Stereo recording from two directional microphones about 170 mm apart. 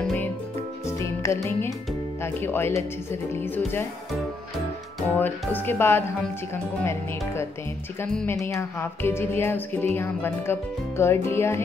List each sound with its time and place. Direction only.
0.0 s music: 10° left (ahead or behind)
2.2 s speech: 15° left (ahead or behind)
5.0 s speech: 10° left (ahead or behind)